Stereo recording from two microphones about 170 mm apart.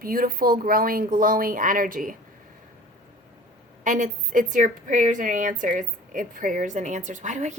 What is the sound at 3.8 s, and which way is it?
A woman's voice, 50° right (ahead or behind).